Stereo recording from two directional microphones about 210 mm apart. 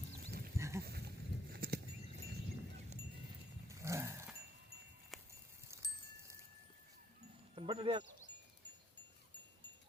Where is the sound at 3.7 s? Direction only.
15° right (ahead or behind).